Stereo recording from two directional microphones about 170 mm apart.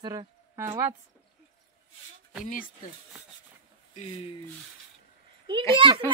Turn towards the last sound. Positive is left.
turn(degrees=-30)  # may be behind; listen again after turning